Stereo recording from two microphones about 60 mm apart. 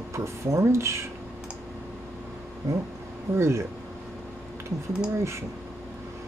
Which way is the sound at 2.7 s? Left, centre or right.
Right.